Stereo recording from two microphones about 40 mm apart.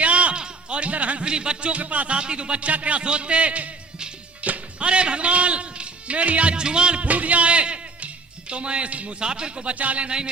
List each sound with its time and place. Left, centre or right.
0.0 s a sound: right
0.4 s music: right
1.2 s speech: right
2.1 s speech: right
4.4 s music: right
4.9 s a man's voice: right
7.1 s speech: right
9.2 s speech: right
9.7 s speech: right